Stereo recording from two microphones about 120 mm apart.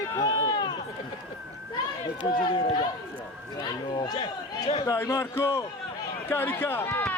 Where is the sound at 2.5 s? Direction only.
45° left (ahead or behind).